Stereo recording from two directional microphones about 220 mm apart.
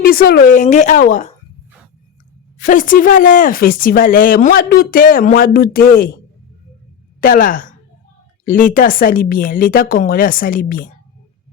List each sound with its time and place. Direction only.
0.0 s speech: 40° left (ahead or behind)
2.6 s speech: 35° left (ahead or behind)
7.2 s speech: 40° left (ahead or behind)